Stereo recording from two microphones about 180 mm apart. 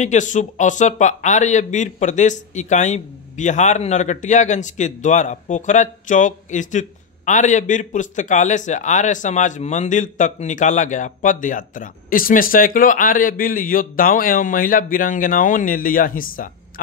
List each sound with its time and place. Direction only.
0.0 s speech: 40° left (ahead or behind)